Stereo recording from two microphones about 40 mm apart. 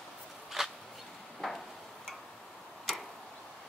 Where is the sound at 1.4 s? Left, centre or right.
Centre.